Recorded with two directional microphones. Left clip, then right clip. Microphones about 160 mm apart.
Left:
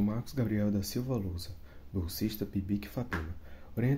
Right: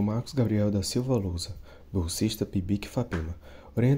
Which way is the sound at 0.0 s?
30° right (ahead or behind).